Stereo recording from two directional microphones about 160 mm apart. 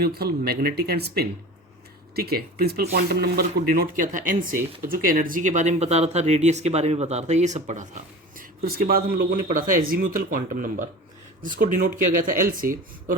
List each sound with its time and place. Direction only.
0.0 s speech: 75° right (ahead or behind); by 7.9 s 45° right (ahead or behind)
8.4 s speech: 60° right (ahead or behind)